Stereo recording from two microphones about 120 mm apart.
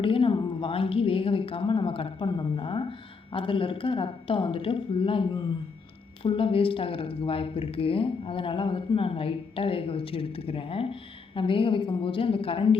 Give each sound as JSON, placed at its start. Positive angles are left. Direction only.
{"t": 0.0, "sound": "speech", "side_deg": 50}